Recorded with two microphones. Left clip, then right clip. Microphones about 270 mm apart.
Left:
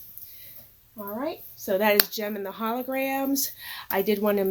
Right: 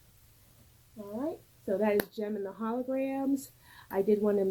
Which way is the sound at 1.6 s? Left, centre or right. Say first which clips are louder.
Left 7 dB; centre.